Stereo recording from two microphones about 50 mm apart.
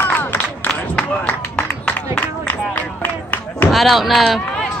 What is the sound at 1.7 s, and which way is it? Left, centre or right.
Music, left.